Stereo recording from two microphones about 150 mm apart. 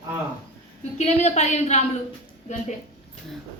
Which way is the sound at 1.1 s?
45° left (ahead or behind).